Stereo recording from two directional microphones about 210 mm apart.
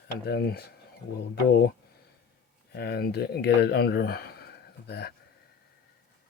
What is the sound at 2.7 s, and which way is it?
Speech, 50° left (ahead or behind).